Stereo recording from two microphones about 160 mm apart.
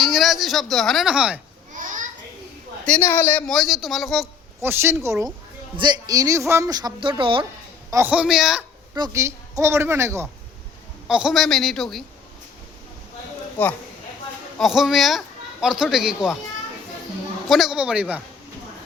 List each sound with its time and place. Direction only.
0.0 s a man's voice: centre (ahead or behind)
1.7 s a sound: 55° right (ahead or behind)
2.8 s a man's voice: 10° left (ahead or behind)
4.6 s a woman's voice: 15° right (ahead or behind); by 7.4 s 35° right (ahead or behind)
7.9 s a woman's voice: 15° right (ahead or behind)
9.0 s a woman's voice: 20° right (ahead or behind)
11.1 s a man's voice: 5° right (ahead or behind)
13.6 s speech: 10° left (ahead or behind)
14.6 s a man's voice: centre (ahead or behind)
17.5 s a man's voice: centre (ahead or behind)